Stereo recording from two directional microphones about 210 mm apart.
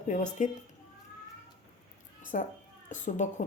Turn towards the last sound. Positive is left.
turn(degrees=35)  # may be behind; listen again after turning